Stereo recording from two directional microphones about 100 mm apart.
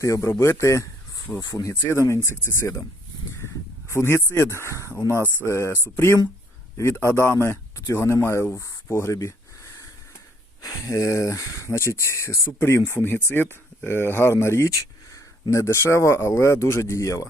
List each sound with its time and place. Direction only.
0.0 s speech: 30° left (ahead or behind)
1.4 s speech: 45° left (ahead or behind)
1.7 s speech: 20° left (ahead or behind)
3.3 s a sound: 25° left (ahead or behind)
4.6 s speech: 30° left (ahead or behind)
10.6 s speech: 35° left (ahead or behind)